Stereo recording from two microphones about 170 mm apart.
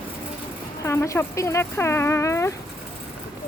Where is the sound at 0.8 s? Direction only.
15° left (ahead or behind).